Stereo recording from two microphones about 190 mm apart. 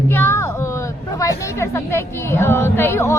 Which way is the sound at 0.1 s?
15° left (ahead or behind).